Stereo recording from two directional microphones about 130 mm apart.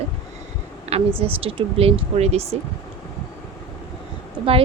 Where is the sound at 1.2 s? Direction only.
45° right (ahead or behind).